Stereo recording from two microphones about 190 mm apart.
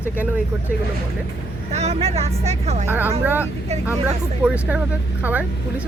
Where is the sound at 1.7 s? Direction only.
35° right (ahead or behind).